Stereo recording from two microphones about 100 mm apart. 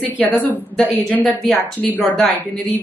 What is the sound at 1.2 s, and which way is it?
Speech, 5° left (ahead or behind).